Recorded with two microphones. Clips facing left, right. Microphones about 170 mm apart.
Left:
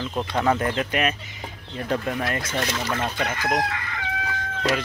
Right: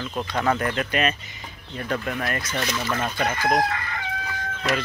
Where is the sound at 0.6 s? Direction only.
25° left (ahead or behind).